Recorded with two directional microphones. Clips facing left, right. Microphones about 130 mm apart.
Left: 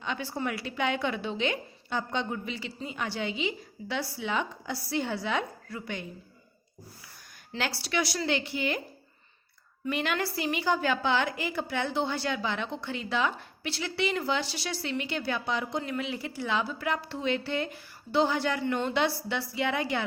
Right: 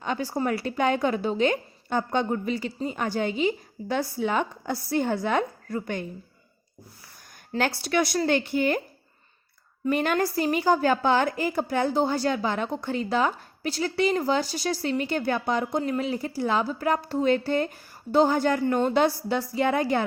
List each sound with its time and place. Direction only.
0.0 s a woman's voice: 40° right (ahead or behind)
7.5 s a woman's voice: 50° right (ahead or behind)
9.8 s a woman's voice: 45° right (ahead or behind)